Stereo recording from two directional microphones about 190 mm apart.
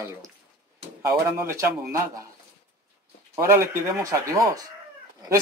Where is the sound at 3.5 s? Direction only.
15° right (ahead or behind).